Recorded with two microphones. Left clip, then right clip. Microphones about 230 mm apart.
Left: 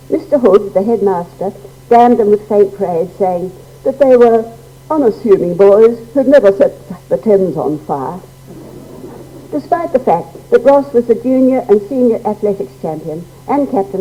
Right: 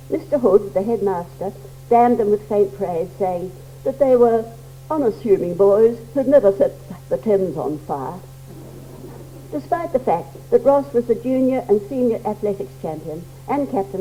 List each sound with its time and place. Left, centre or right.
0.1 s a woman's voice: left
9.5 s a woman's voice: left